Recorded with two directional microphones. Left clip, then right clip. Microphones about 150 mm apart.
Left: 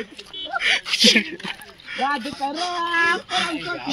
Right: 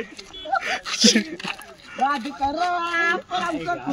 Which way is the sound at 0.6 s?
30° right (ahead or behind).